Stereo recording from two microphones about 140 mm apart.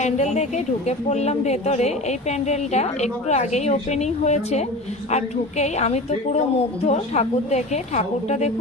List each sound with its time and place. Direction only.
0.0 s speech: 55° left (ahead or behind)